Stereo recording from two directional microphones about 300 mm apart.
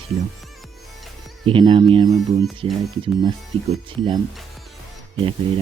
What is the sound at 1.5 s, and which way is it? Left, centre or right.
Speech, centre.